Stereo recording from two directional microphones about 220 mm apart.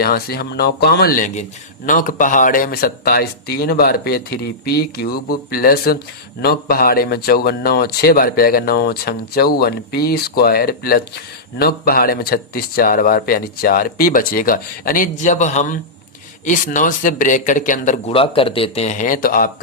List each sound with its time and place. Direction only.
0.0 s speech: 45° left (ahead or behind)